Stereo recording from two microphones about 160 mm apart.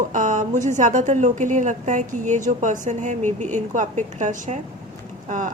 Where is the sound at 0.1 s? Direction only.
55° right (ahead or behind).